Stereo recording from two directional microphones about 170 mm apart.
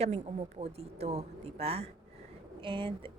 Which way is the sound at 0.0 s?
40° right (ahead or behind).